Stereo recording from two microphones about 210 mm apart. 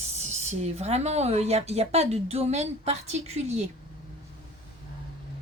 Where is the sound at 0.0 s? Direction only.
30° right (ahead or behind).